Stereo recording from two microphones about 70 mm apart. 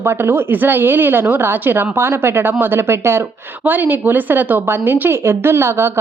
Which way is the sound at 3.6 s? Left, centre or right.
Right.